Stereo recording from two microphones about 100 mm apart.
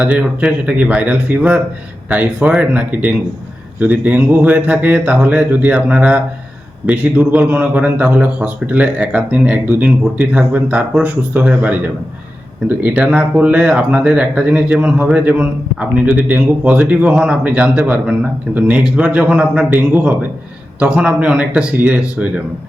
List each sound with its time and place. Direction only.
0.0 s speech: 15° right (ahead or behind)